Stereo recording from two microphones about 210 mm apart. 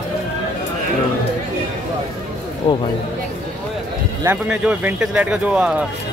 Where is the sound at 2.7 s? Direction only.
25° left (ahead or behind).